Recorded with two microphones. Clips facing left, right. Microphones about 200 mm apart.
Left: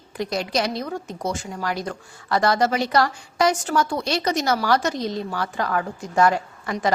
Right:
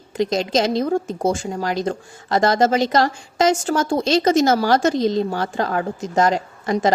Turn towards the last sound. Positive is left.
turn(degrees=-20)  # may be behind; listen again after turning